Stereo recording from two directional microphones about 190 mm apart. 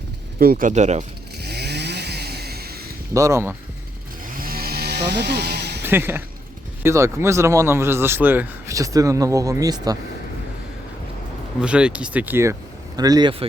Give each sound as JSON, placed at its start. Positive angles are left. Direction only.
{"t": 0.3, "sound": "speech", "side_deg": -50}
{"t": 0.7, "sound": "speech", "side_deg": -40}
{"t": 1.4, "sound": "chainsaw", "side_deg": -60}
{"t": 3.2, "sound": "a man's voice", "side_deg": -15}
{"t": 4.4, "sound": "a sound", "side_deg": -50}
{"t": 5.8, "sound": "a man's voice", "side_deg": -10}
{"t": 11.6, "sound": "a man's voice", "side_deg": -5}